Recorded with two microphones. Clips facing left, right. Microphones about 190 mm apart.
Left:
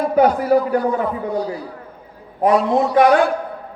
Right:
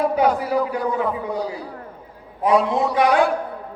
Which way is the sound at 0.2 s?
50° left (ahead or behind).